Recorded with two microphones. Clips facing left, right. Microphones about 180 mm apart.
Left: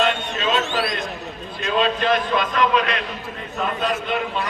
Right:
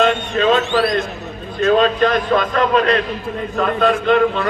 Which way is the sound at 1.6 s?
45° right (ahead or behind).